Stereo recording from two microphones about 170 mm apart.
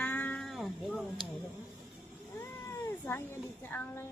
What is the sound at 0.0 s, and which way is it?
Cat, 10° left (ahead or behind).